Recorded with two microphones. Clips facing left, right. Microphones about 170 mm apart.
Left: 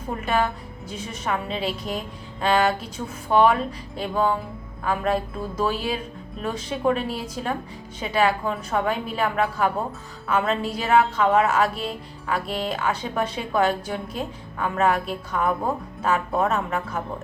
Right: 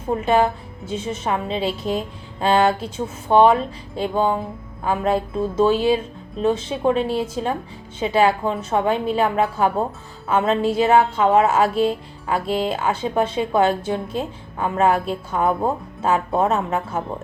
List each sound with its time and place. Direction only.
0.2 s a woman's voice: 25° right (ahead or behind)